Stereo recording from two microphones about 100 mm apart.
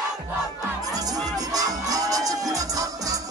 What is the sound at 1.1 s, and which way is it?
Music, centre (ahead or behind).